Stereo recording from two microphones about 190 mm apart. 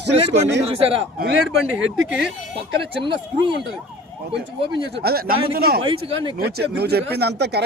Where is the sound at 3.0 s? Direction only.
25° right (ahead or behind).